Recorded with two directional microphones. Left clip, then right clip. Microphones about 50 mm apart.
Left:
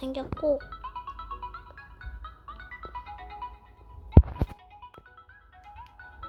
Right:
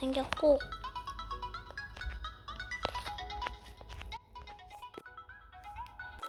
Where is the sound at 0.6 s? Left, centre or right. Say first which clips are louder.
Left 2 dB; right.